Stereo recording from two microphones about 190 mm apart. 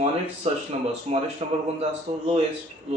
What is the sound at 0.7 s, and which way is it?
Speech, 35° right (ahead or behind).